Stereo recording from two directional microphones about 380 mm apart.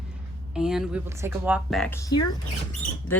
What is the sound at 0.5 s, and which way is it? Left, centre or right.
Speech, centre.